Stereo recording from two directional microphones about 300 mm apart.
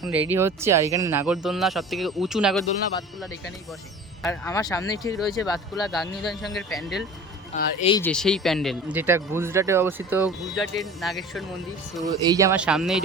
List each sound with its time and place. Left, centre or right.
0.0 s speech: centre
4.2 s speech: centre
5.9 s speech: centre
7.5 s speech: left
8.0 s speech: centre
12.0 s speech: centre